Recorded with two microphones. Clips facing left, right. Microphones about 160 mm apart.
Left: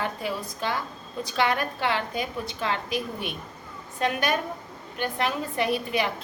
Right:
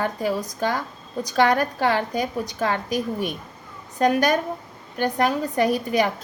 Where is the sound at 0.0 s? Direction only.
40° right (ahead or behind).